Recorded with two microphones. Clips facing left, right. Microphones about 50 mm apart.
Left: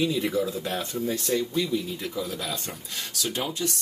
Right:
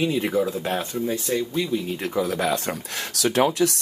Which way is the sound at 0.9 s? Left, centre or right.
Centre.